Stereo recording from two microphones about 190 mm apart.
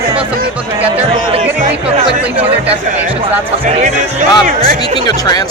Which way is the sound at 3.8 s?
45° right (ahead or behind).